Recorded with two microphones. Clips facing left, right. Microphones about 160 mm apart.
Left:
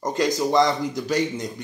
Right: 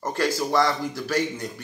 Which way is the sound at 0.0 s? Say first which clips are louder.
Left 3 dB; 15° left (ahead or behind).